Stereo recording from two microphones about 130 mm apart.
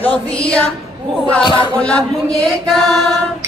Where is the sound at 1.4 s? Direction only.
40° left (ahead or behind).